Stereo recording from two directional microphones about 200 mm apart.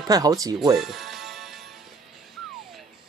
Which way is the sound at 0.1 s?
20° right (ahead or behind).